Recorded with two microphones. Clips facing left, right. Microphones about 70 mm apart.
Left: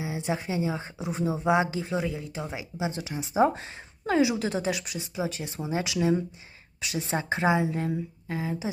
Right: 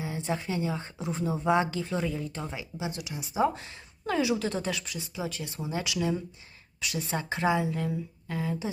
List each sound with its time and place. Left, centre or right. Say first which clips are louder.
0.0 s speech: left 2 dB; centre